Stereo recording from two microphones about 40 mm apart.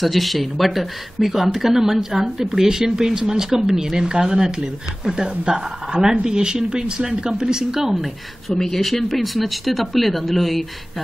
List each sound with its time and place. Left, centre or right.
0.0 s speech: centre